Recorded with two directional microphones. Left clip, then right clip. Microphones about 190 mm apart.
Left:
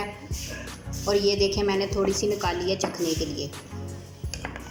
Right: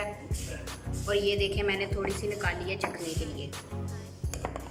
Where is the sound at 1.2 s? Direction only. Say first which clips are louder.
Left 4 dB; 30° left (ahead or behind).